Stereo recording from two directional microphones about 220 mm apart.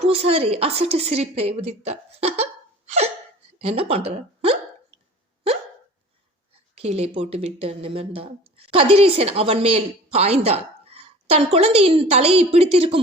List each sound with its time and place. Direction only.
0.0 s a woman's voice: 25° right (ahead or behind)
6.7 s speech: 30° right (ahead or behind)